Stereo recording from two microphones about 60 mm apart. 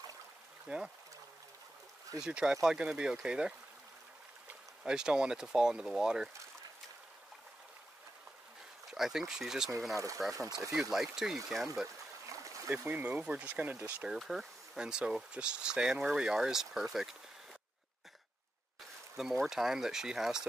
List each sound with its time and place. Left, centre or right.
0.7 s speech: centre
2.2 s speech: centre
4.8 s speech: centre
8.9 s speech: centre
9.9 s speech: right
10.7 s speech: centre
12.3 s trickle: right
13.3 s speech: right
14.1 s speech: centre
14.8 s speech: centre
19.1 s speech: centre